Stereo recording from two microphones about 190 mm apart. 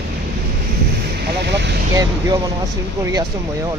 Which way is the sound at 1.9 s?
20° right (ahead or behind).